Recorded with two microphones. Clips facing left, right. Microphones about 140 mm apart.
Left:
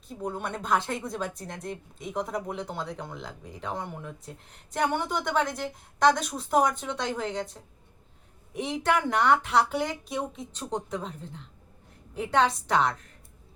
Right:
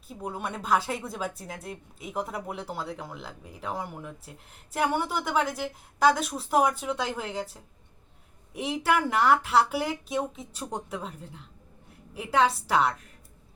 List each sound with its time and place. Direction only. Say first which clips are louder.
0.1 s speech: left 1 dB; 5° right (ahead or behind)